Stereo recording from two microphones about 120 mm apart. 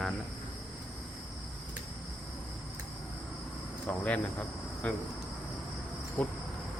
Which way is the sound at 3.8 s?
10° left (ahead or behind).